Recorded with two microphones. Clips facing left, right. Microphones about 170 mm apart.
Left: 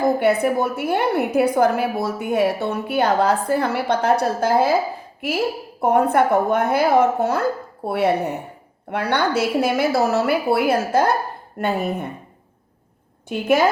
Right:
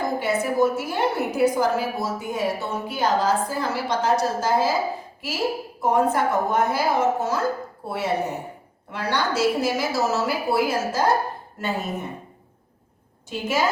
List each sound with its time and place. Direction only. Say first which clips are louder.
0.2 s a woman's voice: left 3 dB; 60° left (ahead or behind)
13.2 s a woman's voice: left 6 dB; 60° left (ahead or behind)